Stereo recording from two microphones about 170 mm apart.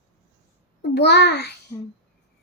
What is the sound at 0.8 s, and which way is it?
Speech, 85° left.